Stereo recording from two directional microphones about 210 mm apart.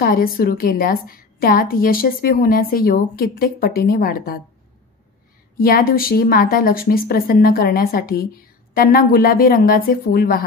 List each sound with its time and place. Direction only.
0.0 s a woman's voice: 45° left (ahead or behind)
5.6 s a woman's voice: 45° left (ahead or behind)